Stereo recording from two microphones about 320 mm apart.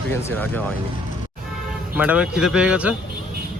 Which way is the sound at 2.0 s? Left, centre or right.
Centre.